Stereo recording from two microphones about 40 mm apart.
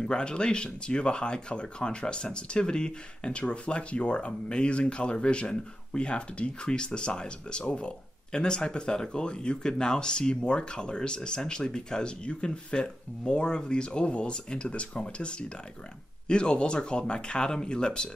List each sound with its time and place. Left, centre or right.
0.0 s speech: left